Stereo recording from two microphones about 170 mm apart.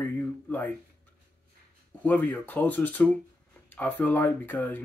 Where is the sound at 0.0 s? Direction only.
10° left (ahead or behind).